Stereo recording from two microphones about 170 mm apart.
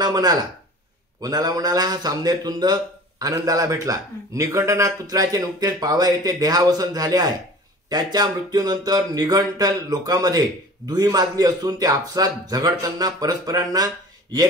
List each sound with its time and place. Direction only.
0.0 s a man's voice: 25° right (ahead or behind)